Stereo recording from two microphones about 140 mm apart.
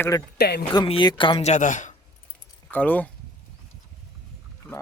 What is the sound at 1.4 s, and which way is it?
Speech, 60° left (ahead or behind).